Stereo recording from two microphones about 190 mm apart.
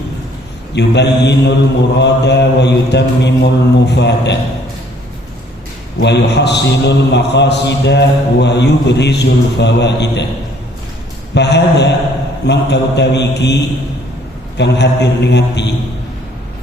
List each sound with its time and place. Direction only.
0.8 s a man's voice: 65° left (ahead or behind)
6.0 s a man's voice: 65° left (ahead or behind)
11.3 s a man's voice: 65° left (ahead or behind)
14.6 s a man's voice: 65° left (ahead or behind)